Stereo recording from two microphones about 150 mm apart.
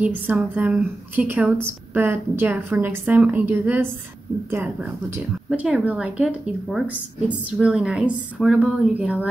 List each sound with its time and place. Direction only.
0.0 s a woman's voice: 10° right (ahead or behind)